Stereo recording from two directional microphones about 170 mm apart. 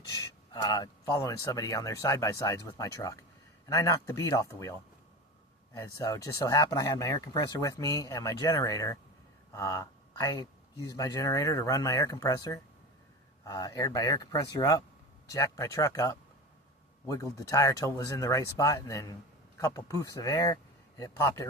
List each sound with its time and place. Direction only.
0.5 s speech: 20° left (ahead or behind)
5.7 s speech: 20° left (ahead or behind)